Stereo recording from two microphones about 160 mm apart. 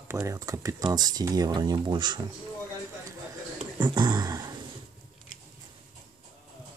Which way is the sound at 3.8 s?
25° right (ahead or behind).